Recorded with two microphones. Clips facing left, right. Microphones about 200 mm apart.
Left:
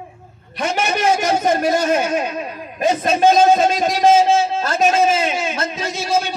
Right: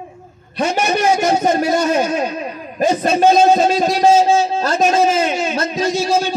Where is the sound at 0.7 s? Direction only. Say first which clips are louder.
Right 1 dB; 30° right (ahead or behind).